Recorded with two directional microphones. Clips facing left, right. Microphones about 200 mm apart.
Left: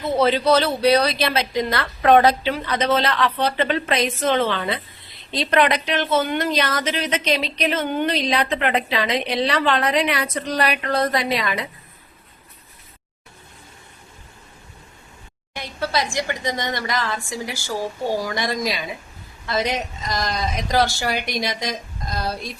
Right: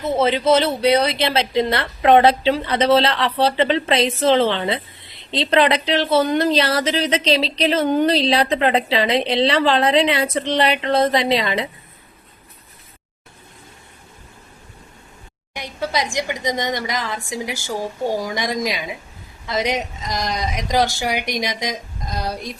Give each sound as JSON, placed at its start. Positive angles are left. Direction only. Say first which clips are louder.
{"t": 0.0, "sound": "a woman's voice", "louder": "right 1 dB", "side_deg": -20}
{"t": 15.5, "sound": "a woman's voice", "louder": "right 1 dB", "side_deg": -15}